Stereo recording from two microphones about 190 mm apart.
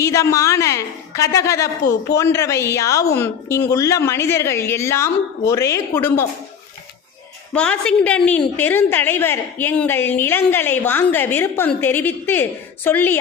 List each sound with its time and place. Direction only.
0.0 s a woman's voice: 15° left (ahead or behind)
7.5 s a woman's voice: 5° left (ahead or behind)